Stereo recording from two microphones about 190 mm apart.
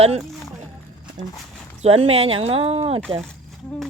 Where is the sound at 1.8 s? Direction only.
30° right (ahead or behind).